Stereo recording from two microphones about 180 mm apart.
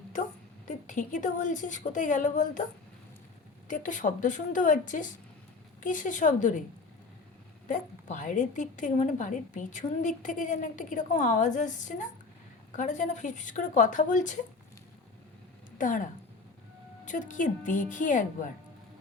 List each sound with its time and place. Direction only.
0.7 s a woman's voice: 45° left (ahead or behind)
3.7 s a woman's voice: 45° left (ahead or behind)
7.7 s a woman's voice: 45° left (ahead or behind)
15.8 s a woman's voice: 45° left (ahead or behind)
17.1 s a woman's voice: 45° left (ahead or behind)